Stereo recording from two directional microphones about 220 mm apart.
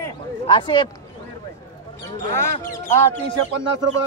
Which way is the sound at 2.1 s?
15° left (ahead or behind).